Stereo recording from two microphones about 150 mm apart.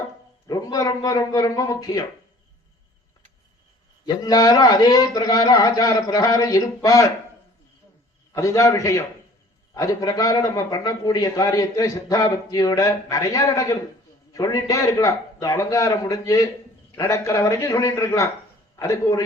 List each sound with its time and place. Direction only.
0.4 s a man's voice: 25° left (ahead or behind)
4.0 s a man's voice: 25° left (ahead or behind)
8.3 s a man's voice: 20° left (ahead or behind)